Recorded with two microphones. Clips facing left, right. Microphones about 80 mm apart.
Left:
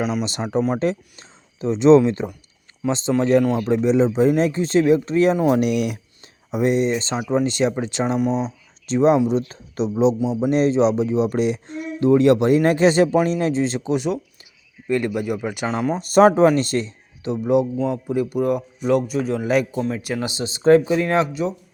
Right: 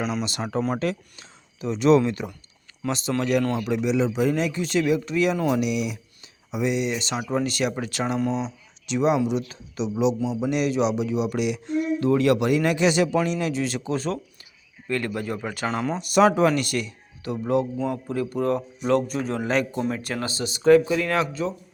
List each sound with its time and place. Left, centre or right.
0.2 s speech: left
5.5 s speech: left; by 8.4 s centre
8.9 s speech: left; by 16.0 s centre
16.0 s a man's voice: left; by 20.3 s centre
20.3 s speech: left